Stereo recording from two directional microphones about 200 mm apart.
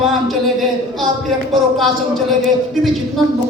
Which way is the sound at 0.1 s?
Centre (ahead or behind).